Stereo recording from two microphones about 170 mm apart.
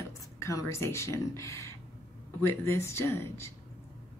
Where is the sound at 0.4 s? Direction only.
15° left (ahead or behind).